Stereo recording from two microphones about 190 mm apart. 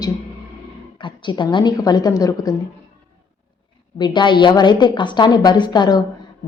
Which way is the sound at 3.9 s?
25° left (ahead or behind).